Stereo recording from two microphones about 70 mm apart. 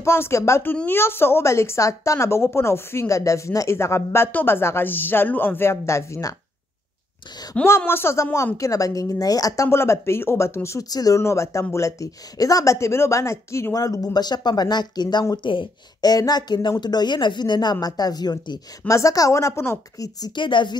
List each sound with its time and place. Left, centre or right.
0.0 s a woman's voice: left
4.3 s a woman's voice: left
7.6 s a woman's voice: left
9.7 s a woman's voice: left
10.9 s speech: left
11.1 s speech: left
13.7 s speech: left
16.0 s a woman's voice: left
18.9 s speech: left
20.0 s speech: left